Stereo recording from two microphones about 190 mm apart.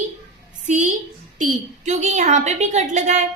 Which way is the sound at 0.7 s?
45° right (ahead or behind).